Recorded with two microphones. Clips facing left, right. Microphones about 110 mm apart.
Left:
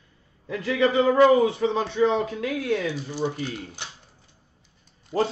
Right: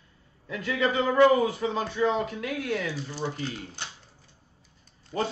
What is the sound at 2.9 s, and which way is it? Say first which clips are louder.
Speech: left 5 dB; 15° left (ahead or behind).